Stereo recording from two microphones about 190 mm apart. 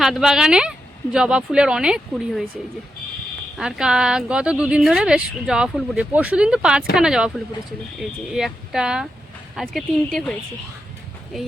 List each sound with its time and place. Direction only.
0.0 s speech: centre (ahead or behind)
3.6 s speech: 5° right (ahead or behind)